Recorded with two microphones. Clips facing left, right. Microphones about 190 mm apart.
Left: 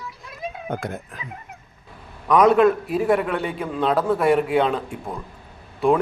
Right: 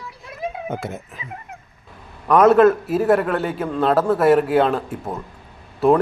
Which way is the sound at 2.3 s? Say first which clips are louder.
Right 3 dB; 5° right (ahead or behind).